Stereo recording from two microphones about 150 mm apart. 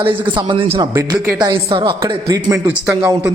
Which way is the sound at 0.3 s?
30° right (ahead or behind).